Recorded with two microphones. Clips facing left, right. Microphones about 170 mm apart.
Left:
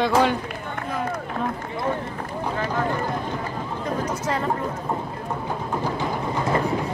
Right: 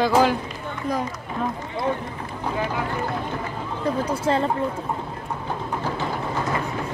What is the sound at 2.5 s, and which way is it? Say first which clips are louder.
Speech: even; 15° right (ahead or behind).